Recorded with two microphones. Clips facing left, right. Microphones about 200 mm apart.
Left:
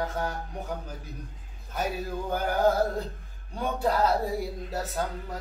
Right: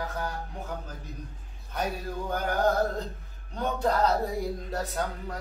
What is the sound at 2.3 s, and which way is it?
Music, 5° left (ahead or behind).